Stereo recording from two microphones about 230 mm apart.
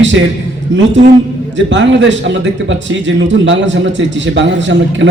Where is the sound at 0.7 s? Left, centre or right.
Right.